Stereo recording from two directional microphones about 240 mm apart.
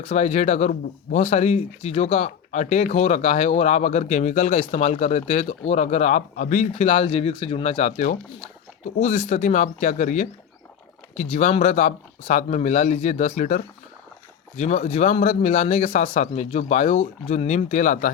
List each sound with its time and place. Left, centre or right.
0.1 s speech: left